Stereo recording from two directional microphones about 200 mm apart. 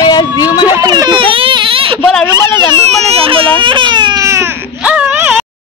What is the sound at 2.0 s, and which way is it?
Speech, 5° left (ahead or behind).